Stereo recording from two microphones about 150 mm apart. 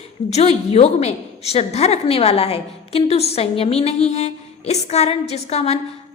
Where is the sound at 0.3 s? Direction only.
45° left (ahead or behind).